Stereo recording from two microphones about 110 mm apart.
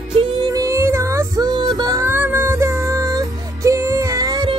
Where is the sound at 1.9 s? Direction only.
20° right (ahead or behind).